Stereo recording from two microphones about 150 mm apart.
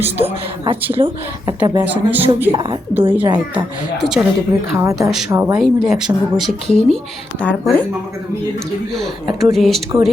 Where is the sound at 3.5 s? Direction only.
5° right (ahead or behind).